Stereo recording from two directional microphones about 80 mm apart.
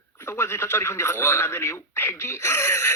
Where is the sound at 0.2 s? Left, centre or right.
Left.